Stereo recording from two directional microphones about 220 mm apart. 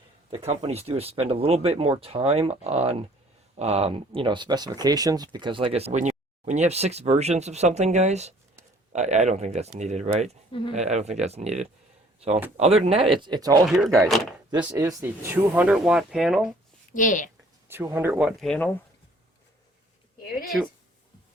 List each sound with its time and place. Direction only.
0.3 s speech: 25° right (ahead or behind)
13.7 s speech: centre (ahead or behind)
14.7 s speech: 15° right (ahead or behind)
16.9 s a woman's voice: 35° left (ahead or behind)
17.7 s speech: 10° right (ahead or behind)
20.4 s speech: centre (ahead or behind)